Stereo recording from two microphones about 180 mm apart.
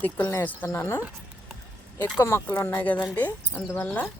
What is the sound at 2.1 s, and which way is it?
Speech, 15° left (ahead or behind).